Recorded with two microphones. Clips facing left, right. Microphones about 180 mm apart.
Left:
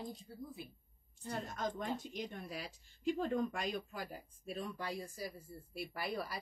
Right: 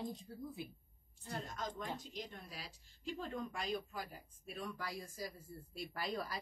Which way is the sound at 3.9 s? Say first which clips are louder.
Left 2 dB; 30° left (ahead or behind).